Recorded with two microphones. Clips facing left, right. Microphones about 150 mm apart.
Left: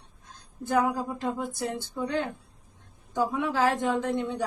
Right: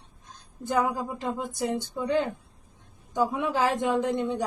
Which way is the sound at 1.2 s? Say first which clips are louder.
Right 1 dB; 15° right (ahead or behind).